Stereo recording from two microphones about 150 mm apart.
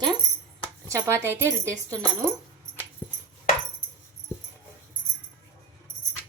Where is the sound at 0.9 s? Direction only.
20° right (ahead or behind).